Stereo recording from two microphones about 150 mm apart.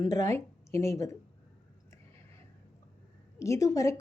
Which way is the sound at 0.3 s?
20° left (ahead or behind).